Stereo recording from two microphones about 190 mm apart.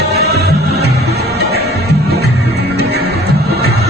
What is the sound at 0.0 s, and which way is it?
Music, 60° right (ahead or behind).